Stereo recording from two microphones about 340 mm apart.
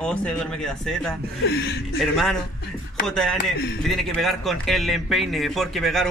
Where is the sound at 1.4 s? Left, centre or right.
Left.